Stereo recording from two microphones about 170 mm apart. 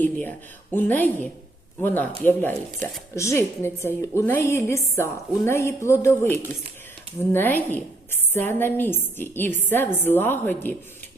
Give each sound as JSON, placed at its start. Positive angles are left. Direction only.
{"t": 0.0, "sound": "a woman's voice", "side_deg": 10}
{"t": 7.3, "sound": "a woman's voice", "side_deg": 10}